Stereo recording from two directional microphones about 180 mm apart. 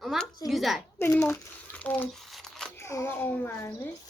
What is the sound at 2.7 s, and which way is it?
A child's voice, 15° left (ahead or behind).